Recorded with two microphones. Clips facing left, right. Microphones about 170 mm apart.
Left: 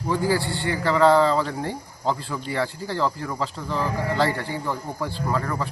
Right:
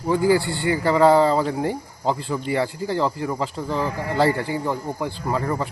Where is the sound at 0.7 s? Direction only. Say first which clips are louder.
Right 2 dB; 25° right (ahead or behind).